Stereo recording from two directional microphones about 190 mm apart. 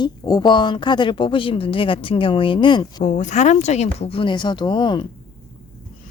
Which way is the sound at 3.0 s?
40° left (ahead or behind).